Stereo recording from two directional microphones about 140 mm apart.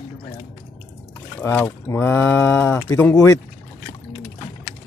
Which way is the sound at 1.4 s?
15° left (ahead or behind).